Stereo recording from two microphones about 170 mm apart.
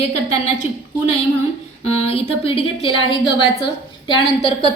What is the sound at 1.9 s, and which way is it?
A woman's voice, 35° left (ahead or behind).